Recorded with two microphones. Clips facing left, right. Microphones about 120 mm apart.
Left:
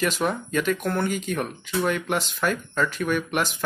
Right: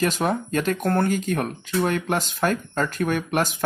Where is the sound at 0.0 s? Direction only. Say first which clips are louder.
Right 2 dB; 40° right (ahead or behind).